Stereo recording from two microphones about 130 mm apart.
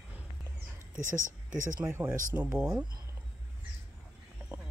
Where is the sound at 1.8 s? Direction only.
20° right (ahead or behind).